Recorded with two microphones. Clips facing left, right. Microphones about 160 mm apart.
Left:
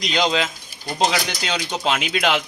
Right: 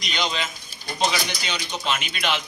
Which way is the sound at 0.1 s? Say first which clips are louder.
Left 6 dB; 90° left.